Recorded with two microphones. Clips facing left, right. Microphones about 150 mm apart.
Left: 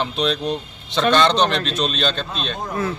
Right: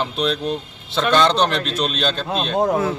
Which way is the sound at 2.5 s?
85° right.